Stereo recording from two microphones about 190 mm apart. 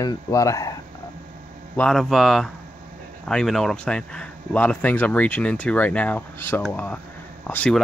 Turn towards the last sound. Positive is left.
turn(degrees=5)  # may be behind; listen again after turning